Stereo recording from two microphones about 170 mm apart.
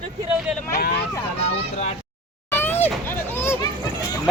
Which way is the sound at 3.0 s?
10° left (ahead or behind).